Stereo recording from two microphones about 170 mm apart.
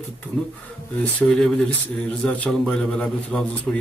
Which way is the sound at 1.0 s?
5° left (ahead or behind).